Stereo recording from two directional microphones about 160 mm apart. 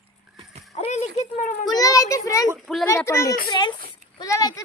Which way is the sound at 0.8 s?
45° left (ahead or behind).